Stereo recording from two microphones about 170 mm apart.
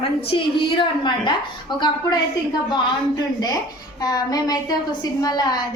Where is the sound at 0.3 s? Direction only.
30° left (ahead or behind).